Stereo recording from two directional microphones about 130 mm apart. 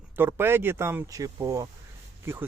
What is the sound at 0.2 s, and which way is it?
Speech, 15° right (ahead or behind).